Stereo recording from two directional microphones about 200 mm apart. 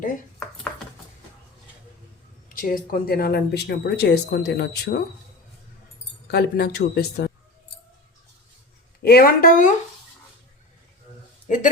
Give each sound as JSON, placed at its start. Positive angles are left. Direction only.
{"t": 2.5, "sound": "speech", "side_deg": 45}
{"t": 6.2, "sound": "speech", "side_deg": 55}
{"t": 9.0, "sound": "speech", "side_deg": 50}
{"t": 11.4, "sound": "speech", "side_deg": 40}